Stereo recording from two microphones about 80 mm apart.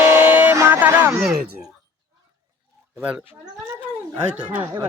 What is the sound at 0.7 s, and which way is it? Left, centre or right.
Speech, right.